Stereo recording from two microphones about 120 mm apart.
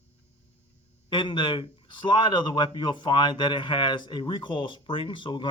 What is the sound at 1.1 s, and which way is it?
Speech, 45° left (ahead or behind).